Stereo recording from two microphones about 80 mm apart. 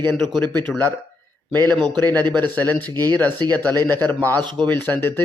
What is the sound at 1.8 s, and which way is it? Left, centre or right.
Speech, right.